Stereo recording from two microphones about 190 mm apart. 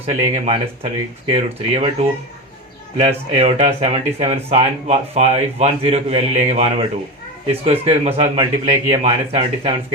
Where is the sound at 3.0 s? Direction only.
35° right (ahead or behind).